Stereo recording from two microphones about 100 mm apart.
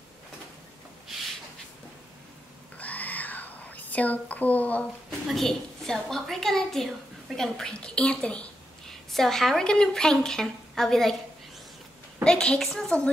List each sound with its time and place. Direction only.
2.8 s whispering: 15° left (ahead or behind)
5.2 s a woman's voice: centre (ahead or behind)
12.2 s a woman's voice: 10° left (ahead or behind)